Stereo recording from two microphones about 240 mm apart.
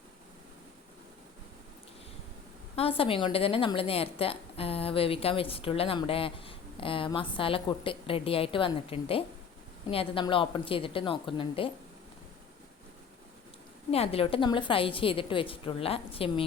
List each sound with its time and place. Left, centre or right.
2.7 s a woman's voice: left
13.9 s a woman's voice: left